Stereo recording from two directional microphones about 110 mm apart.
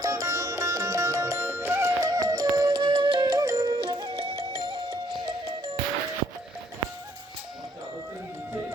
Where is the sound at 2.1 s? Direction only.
35° right (ahead or behind).